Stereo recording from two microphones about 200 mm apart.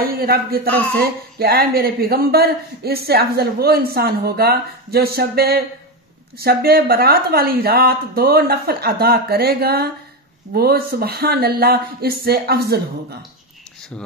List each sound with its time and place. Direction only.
0.1 s speech: 50° right (ahead or behind)